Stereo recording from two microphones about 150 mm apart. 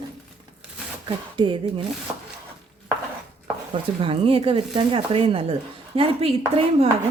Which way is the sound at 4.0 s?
35° right (ahead or behind).